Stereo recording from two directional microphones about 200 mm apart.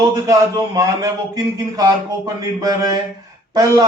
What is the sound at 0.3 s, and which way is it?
Speech, 15° right (ahead or behind).